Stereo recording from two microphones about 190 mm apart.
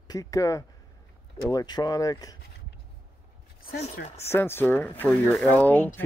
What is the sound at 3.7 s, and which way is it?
Speech, 50° left (ahead or behind).